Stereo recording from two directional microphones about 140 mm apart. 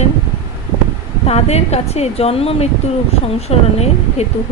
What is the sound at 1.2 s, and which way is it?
Speech, 50° left (ahead or behind).